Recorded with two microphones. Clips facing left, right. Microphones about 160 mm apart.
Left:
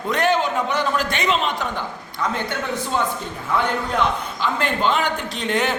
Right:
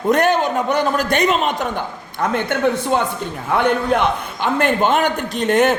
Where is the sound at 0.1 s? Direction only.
45° right (ahead or behind).